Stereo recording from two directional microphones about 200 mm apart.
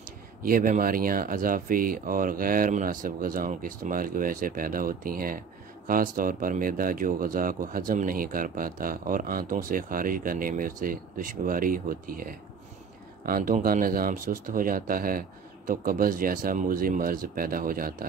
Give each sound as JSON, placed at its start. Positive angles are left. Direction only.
{"t": 0.4, "sound": "speech", "side_deg": -45}